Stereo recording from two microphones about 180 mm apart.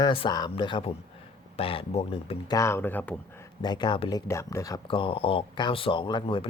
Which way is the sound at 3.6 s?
25° left (ahead or behind).